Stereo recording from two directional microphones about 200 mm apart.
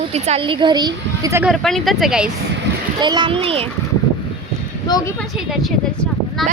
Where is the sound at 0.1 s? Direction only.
30° right (ahead or behind); by 1.5 s 15° right (ahead or behind).